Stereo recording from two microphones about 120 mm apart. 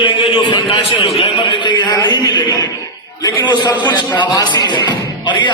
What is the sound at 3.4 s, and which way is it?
Speech, 40° left (ahead or behind).